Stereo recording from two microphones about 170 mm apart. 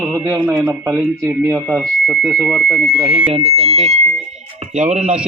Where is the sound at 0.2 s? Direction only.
15° right (ahead or behind).